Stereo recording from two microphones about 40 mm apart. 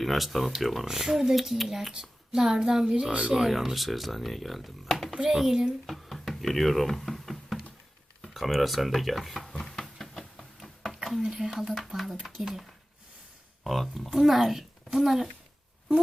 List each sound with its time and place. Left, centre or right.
0.0 s a woman's voice: centre
3.1 s speech: right
3.3 s speech: centre
5.3 s a woman's voice: centre
5.8 s a sound: centre
8.3 s speech: centre
9.5 s a sound: centre
11.2 s a woman's voice: centre
13.7 s speech: centre